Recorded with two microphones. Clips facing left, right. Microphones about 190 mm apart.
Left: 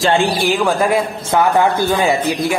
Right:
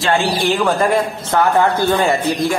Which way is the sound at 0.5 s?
Centre (ahead or behind).